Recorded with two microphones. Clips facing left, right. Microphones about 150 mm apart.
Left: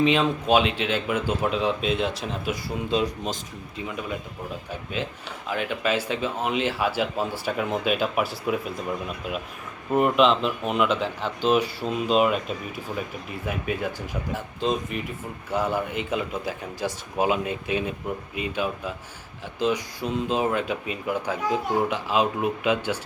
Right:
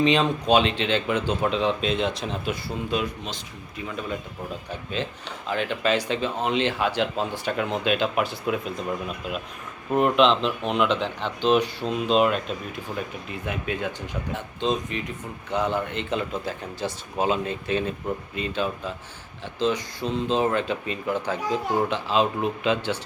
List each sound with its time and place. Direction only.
0.0 s speech: 5° left (ahead or behind)
3.8 s speech: 15° left (ahead or behind)
4.7 s speech: 5° left (ahead or behind)